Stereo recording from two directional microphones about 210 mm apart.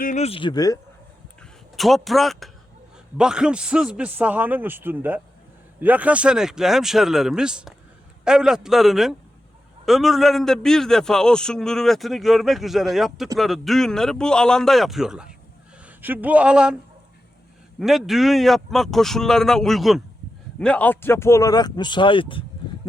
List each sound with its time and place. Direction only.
0.0 s speech: 35° left (ahead or behind); by 0.8 s 20° left (ahead or behind)
1.4 s a sound: centre (ahead or behind)
3.2 s a man's voice: 5° right (ahead or behind)
17.7 s a man's voice: centre (ahead or behind); by 22.4 s 25° left (ahead or behind)